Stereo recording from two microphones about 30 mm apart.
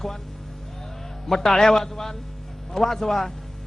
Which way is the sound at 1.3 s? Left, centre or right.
Centre.